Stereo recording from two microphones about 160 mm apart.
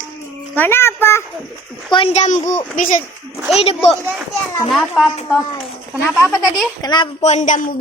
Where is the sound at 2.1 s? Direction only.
50° left (ahead or behind).